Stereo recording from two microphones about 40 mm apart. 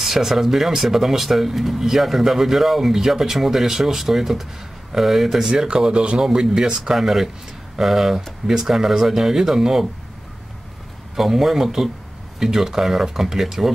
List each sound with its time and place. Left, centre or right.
0.0 s speech: centre
5.5 s speech: right
11.1 s speech: centre